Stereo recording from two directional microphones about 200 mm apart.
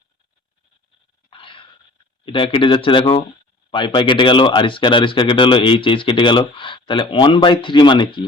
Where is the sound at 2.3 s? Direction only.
25° left (ahead or behind).